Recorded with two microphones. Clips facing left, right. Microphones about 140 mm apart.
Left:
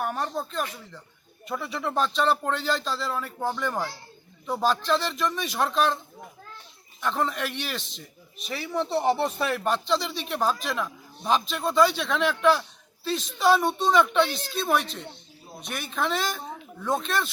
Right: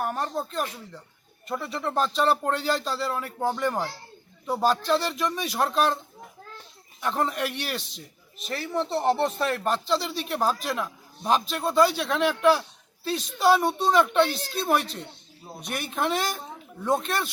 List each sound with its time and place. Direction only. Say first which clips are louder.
0.0 s a man's voice: right 1 dB; centre (ahead or behind)
7.0 s a man's voice: right 1 dB; 5° right (ahead or behind)